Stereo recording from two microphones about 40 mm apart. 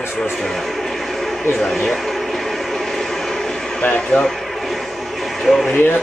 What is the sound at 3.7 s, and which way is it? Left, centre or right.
Speech, left.